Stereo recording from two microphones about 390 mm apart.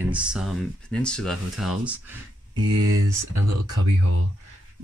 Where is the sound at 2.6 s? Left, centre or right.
Right.